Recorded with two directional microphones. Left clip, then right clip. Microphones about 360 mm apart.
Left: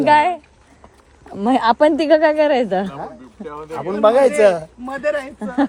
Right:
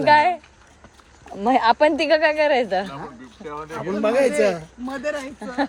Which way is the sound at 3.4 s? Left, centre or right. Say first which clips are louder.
Left 1 dB; right.